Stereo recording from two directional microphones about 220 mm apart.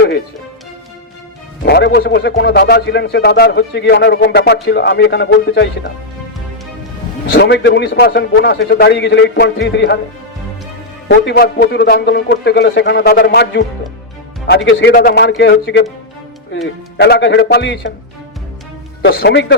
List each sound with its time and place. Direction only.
1.6 s a man's voice: 45° left (ahead or behind)
7.3 s a man's voice: 50° left (ahead or behind)
11.1 s a man's voice: 45° left (ahead or behind)
17.0 s a man's voice: 50° left (ahead or behind)
19.0 s a man's voice: 45° left (ahead or behind)